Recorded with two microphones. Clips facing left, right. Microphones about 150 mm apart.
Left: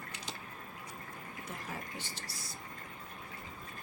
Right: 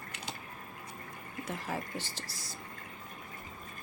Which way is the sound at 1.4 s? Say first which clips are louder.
Right 7 dB; 90° right.